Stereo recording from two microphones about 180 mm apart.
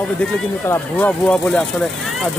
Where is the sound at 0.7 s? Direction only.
5° left (ahead or behind).